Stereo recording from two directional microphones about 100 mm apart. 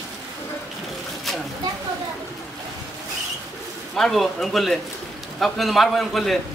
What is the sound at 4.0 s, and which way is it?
A man's voice, centre (ahead or behind).